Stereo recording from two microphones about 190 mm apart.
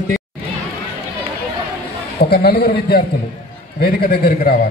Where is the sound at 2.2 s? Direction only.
55° left (ahead or behind).